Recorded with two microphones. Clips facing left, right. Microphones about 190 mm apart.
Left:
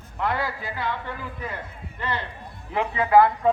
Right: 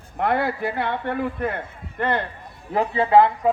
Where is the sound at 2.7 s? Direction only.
30° right (ahead or behind).